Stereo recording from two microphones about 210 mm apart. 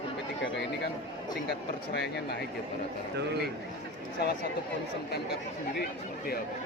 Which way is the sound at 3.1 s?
50° right (ahead or behind).